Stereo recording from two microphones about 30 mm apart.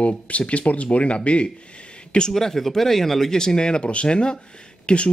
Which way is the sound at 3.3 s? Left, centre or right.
Left.